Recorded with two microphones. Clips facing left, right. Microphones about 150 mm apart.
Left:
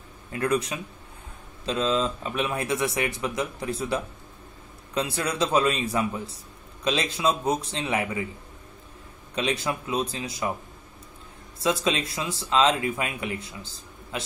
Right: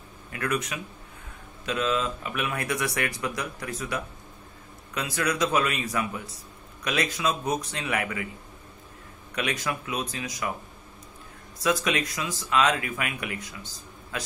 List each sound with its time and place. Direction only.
0.3 s a man's voice: 30° left (ahead or behind)
9.3 s a man's voice: 25° left (ahead or behind)
11.6 s a man's voice: 25° left (ahead or behind)